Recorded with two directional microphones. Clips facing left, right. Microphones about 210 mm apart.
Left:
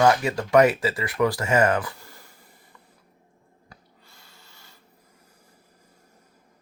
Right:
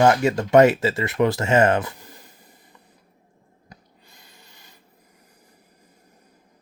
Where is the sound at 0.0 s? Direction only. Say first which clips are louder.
Right 3 dB; 25° right (ahead or behind).